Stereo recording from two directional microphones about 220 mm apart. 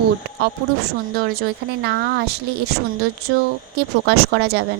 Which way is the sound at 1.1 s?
45° right (ahead or behind).